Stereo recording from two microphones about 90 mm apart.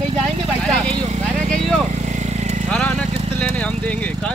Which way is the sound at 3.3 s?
15° left (ahead or behind).